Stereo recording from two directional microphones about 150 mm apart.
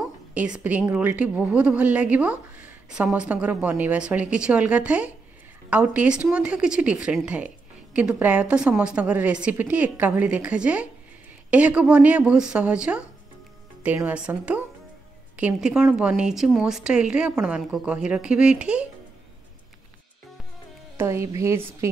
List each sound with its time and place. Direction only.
0.3 s a woman's voice: 10° right (ahead or behind)
21.0 s a woman's voice: 20° right (ahead or behind)